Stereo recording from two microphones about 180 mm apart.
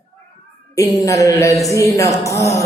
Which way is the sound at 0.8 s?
20° left (ahead or behind).